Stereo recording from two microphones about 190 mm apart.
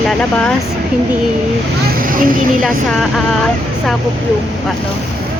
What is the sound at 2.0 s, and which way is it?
Vehicle, 45° right (ahead or behind).